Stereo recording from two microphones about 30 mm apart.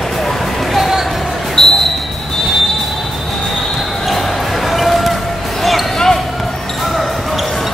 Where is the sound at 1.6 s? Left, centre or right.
Centre.